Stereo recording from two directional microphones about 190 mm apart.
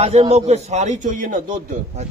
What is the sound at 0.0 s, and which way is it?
A man's voice, 30° right (ahead or behind).